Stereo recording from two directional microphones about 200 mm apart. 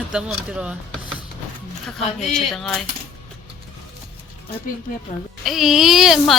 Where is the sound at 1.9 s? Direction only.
Centre (ahead or behind).